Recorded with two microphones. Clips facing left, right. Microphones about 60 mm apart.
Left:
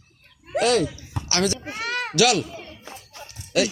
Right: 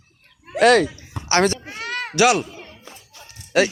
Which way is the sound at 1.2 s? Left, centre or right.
Centre.